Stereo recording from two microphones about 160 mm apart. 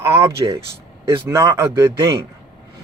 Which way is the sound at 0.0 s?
20° right (ahead or behind).